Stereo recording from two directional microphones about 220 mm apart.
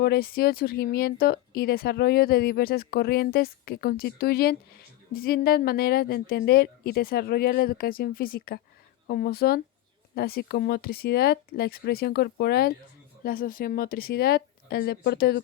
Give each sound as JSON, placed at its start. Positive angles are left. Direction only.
{"t": 0.0, "sound": "speech", "side_deg": 45}